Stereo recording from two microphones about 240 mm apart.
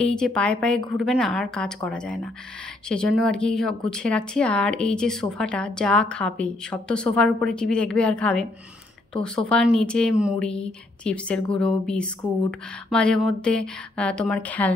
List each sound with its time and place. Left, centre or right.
0.1 s a woman's voice: centre